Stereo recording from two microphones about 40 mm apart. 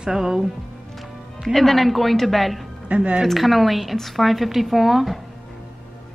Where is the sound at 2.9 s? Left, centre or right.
Right.